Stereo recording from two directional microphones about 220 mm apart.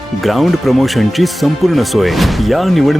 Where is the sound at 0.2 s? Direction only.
Centre (ahead or behind).